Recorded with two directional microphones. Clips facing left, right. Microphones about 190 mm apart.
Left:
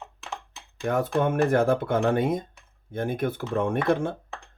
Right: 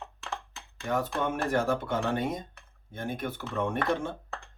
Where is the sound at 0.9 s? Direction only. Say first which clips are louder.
Left 6 dB; 55° left (ahead or behind).